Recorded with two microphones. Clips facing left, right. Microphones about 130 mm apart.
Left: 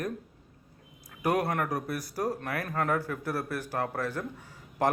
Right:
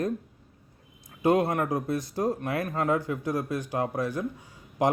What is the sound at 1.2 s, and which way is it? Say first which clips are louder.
A man's voice: right 4 dB; 25° right (ahead or behind).